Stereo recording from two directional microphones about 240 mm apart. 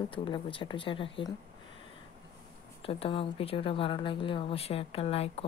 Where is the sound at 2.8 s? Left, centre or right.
Left.